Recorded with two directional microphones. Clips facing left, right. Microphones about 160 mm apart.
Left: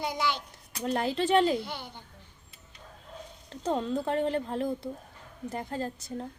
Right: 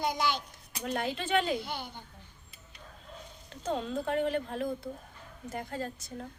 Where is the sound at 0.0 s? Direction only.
25° left (ahead or behind).